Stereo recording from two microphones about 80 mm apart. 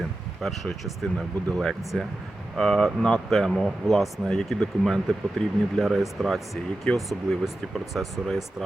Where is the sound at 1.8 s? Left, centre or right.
Centre.